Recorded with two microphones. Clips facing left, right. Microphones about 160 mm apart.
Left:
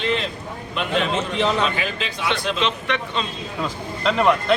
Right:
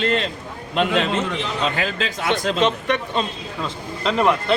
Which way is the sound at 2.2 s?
45° right (ahead or behind).